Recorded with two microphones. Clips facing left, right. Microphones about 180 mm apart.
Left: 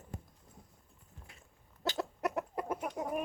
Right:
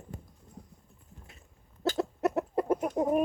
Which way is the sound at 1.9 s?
25° right (ahead or behind).